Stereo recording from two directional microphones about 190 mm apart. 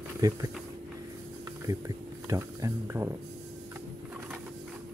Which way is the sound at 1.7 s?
15° right (ahead or behind).